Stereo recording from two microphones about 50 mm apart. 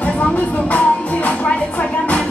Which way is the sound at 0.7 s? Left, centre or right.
Left.